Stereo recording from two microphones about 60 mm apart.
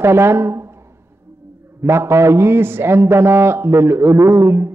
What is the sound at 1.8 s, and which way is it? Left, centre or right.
A man's voice, right.